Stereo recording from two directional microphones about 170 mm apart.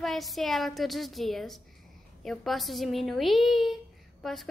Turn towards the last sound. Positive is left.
turn(degrees=0)  # may be behind; listen again after turning